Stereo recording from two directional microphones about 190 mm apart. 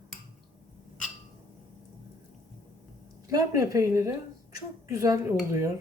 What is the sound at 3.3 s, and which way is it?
A woman's voice, 15° right (ahead or behind).